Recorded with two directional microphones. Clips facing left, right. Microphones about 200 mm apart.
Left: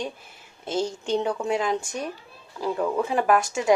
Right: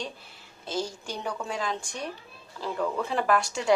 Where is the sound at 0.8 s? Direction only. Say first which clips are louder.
Left 8 dB; 25° left (ahead or behind).